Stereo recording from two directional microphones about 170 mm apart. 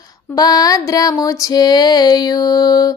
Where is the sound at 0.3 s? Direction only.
20° left (ahead or behind).